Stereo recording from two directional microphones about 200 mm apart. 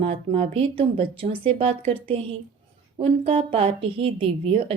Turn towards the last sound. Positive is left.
turn(degrees=-25)  # may be behind; listen again after turning